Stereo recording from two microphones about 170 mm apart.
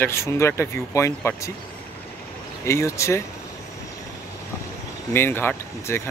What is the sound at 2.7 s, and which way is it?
Speech, 15° left (ahead or behind).